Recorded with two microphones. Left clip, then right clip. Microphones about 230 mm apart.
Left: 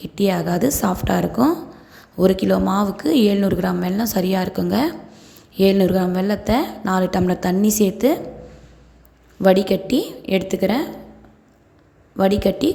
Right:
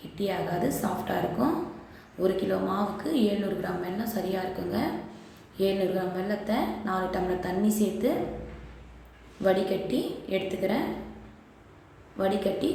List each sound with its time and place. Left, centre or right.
0.2 s speech: left
9.4 s speech: left
12.1 s speech: left